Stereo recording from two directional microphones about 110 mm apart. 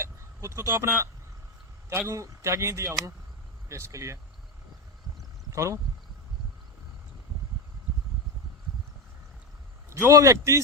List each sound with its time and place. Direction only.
0.0 s speech: 25° right (ahead or behind)
5.5 s speech: 25° right (ahead or behind)
9.9 s speech: 25° right (ahead or behind)